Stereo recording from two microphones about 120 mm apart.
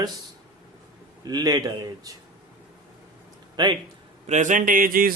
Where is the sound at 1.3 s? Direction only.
35° right (ahead or behind).